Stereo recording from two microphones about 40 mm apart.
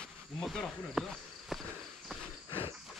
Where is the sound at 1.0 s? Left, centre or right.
Centre.